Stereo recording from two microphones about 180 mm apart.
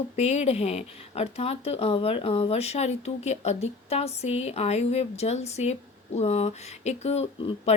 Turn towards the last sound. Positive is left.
turn(degrees=30)  # may be behind; listen again after turning